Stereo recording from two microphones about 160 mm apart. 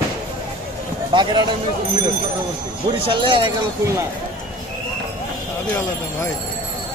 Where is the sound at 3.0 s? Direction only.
30° right (ahead or behind).